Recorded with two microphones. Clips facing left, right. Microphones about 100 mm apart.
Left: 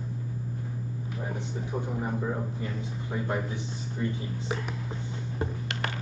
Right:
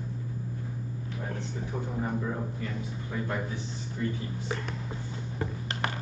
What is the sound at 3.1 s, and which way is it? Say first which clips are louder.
Speech: left 2 dB; 20° left (ahead or behind).